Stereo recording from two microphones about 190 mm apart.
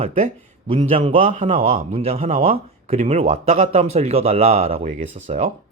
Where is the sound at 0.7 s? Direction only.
25° right (ahead or behind).